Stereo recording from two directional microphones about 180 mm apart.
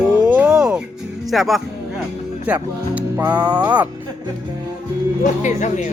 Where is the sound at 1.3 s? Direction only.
Centre (ahead or behind).